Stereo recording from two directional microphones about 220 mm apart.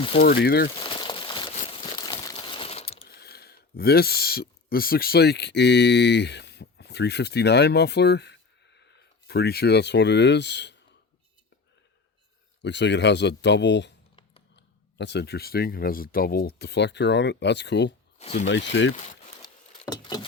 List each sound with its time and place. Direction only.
0.2 s speech: 45° left (ahead or behind)
0.8 s crumpling: 20° left (ahead or behind)
2.9 s speech: 45° left (ahead or behind)
12.6 s speech: 55° left (ahead or behind)
19.4 s a sound: 20° left (ahead or behind)